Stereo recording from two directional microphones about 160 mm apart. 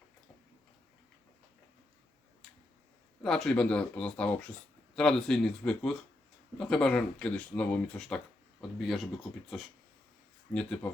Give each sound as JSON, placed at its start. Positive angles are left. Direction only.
{"t": 3.2, "sound": "speech", "side_deg": 5}
{"t": 10.5, "sound": "speech", "side_deg": 5}